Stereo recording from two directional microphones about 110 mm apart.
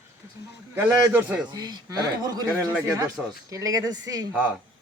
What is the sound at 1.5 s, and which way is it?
Speech, 35° right (ahead or behind).